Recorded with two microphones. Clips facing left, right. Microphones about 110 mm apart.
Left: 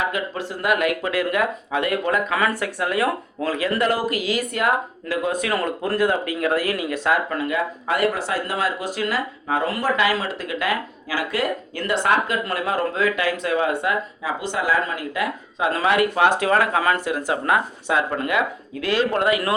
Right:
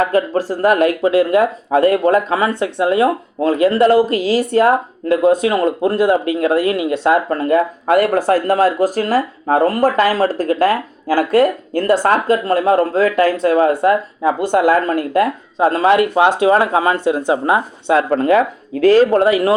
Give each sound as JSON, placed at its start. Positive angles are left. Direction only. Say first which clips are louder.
{"t": 0.0, "sound": "speech", "louder": "right 10 dB", "side_deg": -40}
{"t": 13.8, "sound": "speech", "louder": "right 10 dB", "side_deg": -50}
{"t": 15.5, "sound": "speech", "louder": "right 7 dB", "side_deg": -35}
{"t": 18.2, "sound": "speech", "louder": "right 9 dB", "side_deg": -35}